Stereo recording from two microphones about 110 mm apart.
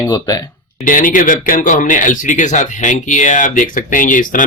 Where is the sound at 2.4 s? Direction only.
90° left.